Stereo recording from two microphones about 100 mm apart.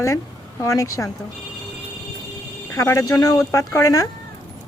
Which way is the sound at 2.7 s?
30° left (ahead or behind).